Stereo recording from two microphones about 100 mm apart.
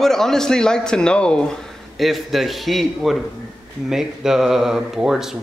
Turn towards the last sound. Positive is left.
turn(degrees=-5)  # may be behind; listen again after turning